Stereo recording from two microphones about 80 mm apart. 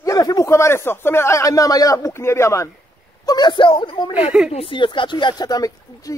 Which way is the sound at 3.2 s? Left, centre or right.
Left.